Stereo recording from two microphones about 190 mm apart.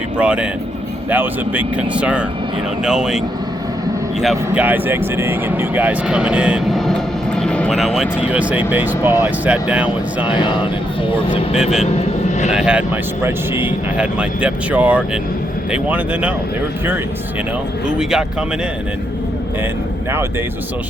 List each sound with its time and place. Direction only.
0.2 s speech: 5° right (ahead or behind)
10.3 s speech: 25° left (ahead or behind)
11.6 s speech: centre (ahead or behind)
11.9 s vehicle: 35° left (ahead or behind)
12.5 s speech: 5° right (ahead or behind)
17.8 s speech: 5° right (ahead or behind)